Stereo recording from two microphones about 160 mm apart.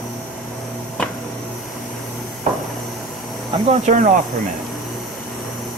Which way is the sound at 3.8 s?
55° right (ahead or behind).